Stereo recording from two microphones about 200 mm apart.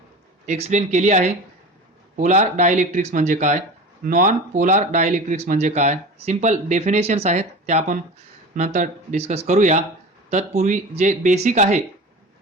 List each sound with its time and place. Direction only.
0.4 s speech: 35° right (ahead or behind)